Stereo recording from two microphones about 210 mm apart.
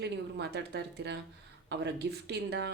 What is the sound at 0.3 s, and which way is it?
Speech, 55° right (ahead or behind).